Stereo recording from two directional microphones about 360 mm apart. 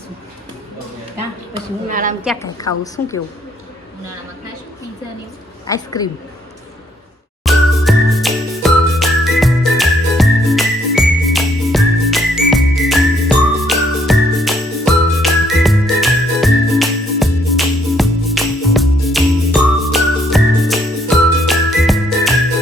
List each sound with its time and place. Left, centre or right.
1.9 s a woman's voice: right
2.2 s a woman's voice: centre
5.6 s a woman's voice: centre
7.4 s jingle: centre